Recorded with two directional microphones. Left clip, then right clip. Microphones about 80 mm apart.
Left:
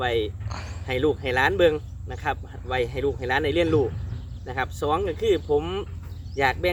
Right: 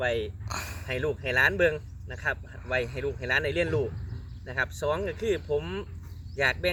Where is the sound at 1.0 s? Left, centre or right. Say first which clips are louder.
Left 2 dB; left.